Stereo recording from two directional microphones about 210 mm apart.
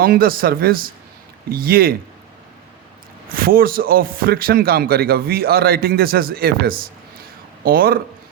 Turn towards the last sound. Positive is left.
turn(degrees=-45)  # may be behind; listen again after turning